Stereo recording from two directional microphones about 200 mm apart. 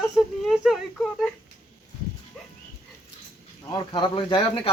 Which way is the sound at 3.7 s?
20° left (ahead or behind).